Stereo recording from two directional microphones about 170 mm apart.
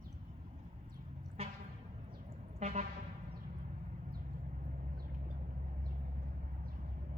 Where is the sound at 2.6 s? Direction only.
40° right (ahead or behind).